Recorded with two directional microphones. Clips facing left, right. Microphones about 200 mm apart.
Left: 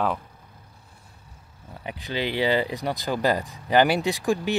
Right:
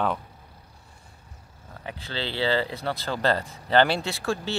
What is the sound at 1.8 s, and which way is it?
Speech, 15° left (ahead or behind).